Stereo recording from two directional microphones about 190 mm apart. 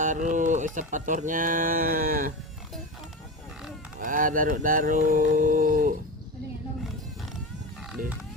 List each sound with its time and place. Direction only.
0.0 s speech: 40° right (ahead or behind)
4.0 s speech: 45° right (ahead or behind)